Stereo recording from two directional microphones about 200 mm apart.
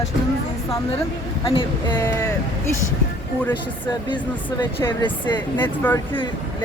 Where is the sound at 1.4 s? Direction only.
25° left (ahead or behind).